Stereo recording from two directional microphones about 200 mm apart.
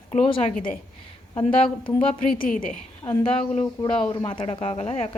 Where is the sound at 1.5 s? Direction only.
25° left (ahead or behind).